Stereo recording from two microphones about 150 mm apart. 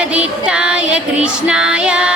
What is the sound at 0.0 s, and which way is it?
Female singing, 10° right (ahead or behind).